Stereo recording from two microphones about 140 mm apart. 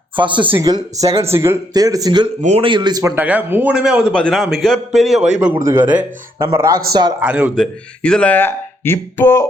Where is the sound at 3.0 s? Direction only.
10° right (ahead or behind).